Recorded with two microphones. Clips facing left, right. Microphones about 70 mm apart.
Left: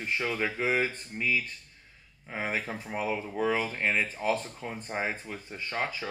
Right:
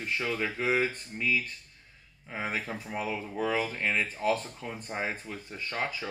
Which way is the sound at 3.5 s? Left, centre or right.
Left.